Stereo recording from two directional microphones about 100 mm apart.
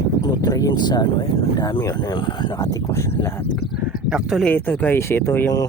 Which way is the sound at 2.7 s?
35° left (ahead or behind).